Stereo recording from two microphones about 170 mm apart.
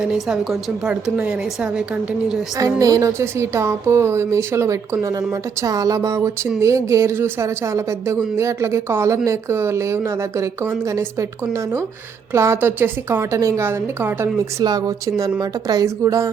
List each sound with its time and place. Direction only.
0.0 s a woman's voice: 5° right (ahead or behind)
2.6 s a woman's voice: 20° right (ahead or behind)